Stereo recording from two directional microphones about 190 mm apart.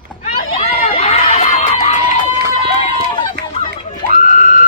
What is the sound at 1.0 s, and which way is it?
Crowd, 30° left (ahead or behind).